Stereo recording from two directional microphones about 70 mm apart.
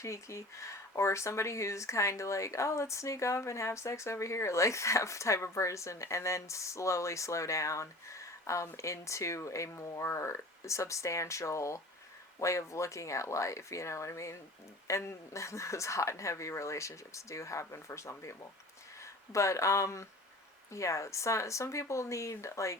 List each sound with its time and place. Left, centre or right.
0.0 s speech: left